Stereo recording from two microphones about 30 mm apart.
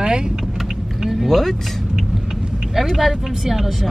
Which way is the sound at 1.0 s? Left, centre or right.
Centre.